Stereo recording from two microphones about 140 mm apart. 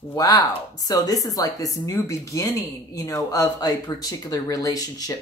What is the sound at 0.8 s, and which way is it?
Speech, 25° left (ahead or behind).